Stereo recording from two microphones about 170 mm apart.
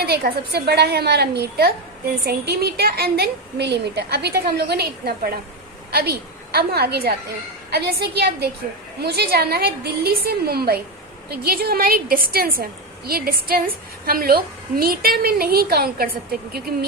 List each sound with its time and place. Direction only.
0.0 s a woman's voice: 65° right (ahead or behind)